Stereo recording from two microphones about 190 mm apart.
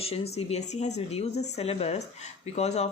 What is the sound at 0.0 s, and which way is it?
Speech, 30° left (ahead or behind).